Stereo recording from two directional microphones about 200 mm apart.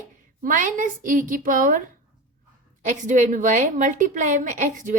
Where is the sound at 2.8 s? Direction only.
40° right (ahead or behind).